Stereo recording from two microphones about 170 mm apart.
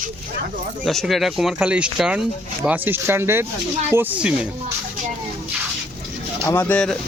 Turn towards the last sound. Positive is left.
turn(degrees=5)  # may be behind; listen again after turning